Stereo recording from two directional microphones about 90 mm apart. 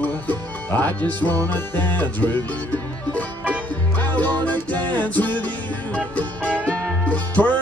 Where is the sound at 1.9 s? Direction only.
20° left (ahead or behind).